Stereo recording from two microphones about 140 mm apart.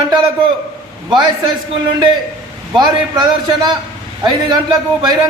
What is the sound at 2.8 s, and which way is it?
A man's voice, 30° right (ahead or behind).